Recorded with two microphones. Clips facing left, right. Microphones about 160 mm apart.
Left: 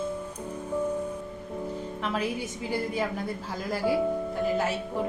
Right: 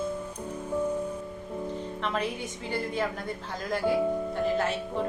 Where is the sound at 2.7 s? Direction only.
5° left (ahead or behind).